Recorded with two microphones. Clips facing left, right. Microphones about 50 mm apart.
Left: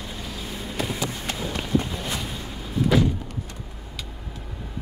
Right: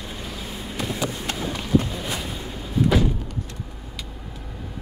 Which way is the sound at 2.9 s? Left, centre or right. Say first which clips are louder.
Left 2 dB; centre.